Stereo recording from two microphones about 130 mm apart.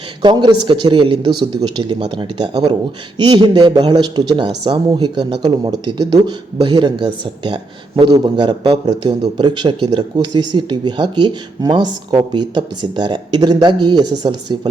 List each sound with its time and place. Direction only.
0.2 s speech: 35° right (ahead or behind)